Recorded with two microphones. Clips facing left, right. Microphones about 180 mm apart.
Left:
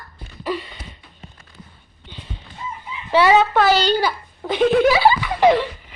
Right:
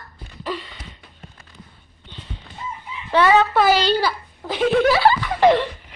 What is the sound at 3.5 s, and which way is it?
A child's voice, 10° right (ahead or behind).